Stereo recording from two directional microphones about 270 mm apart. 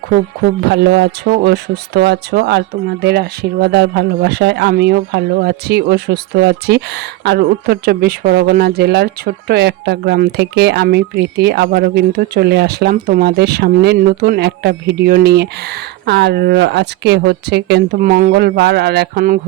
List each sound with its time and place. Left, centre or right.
0.7 s speech: right